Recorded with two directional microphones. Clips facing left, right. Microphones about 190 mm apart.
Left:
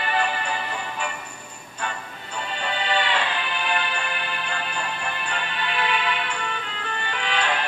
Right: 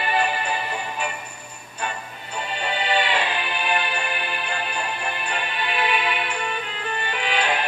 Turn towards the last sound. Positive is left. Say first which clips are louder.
# right 2 dB
turn(degrees=-15)  # may be behind; listen again after turning